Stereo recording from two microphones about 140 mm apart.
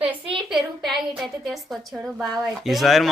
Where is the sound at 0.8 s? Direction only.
Centre (ahead or behind).